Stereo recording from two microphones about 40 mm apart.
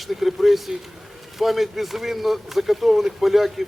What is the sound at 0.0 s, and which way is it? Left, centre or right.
Speech, centre.